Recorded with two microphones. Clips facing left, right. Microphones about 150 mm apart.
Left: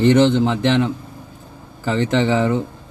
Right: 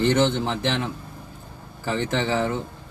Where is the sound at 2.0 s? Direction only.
15° left (ahead or behind).